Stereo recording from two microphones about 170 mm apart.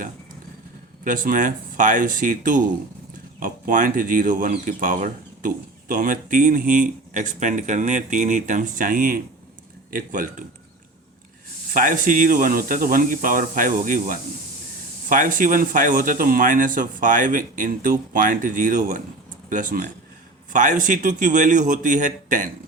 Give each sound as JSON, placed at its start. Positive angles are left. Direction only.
{"t": 1.0, "sound": "speech", "side_deg": -55}
{"t": 11.7, "sound": "speech", "side_deg": -55}